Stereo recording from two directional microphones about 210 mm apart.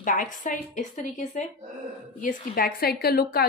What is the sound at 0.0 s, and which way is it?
A woman's voice, 40° left (ahead or behind).